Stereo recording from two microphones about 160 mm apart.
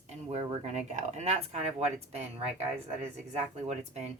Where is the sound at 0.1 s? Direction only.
45° right (ahead or behind).